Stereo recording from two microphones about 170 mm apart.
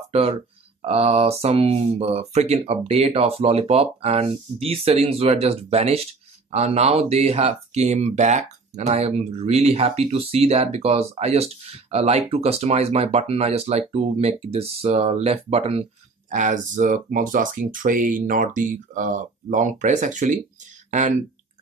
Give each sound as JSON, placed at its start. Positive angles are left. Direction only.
{"t": 0.1, "sound": "speech", "side_deg": -40}
{"t": 16.3, "sound": "speech", "side_deg": -45}